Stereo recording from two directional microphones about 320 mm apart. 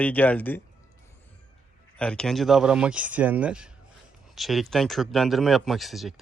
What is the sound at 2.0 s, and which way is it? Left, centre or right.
Speech, centre.